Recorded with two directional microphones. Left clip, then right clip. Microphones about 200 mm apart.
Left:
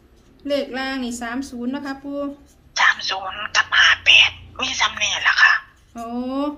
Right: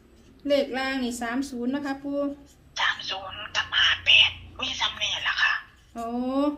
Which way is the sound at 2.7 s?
50° left (ahead or behind).